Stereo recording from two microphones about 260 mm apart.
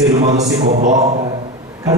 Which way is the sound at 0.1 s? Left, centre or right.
Right.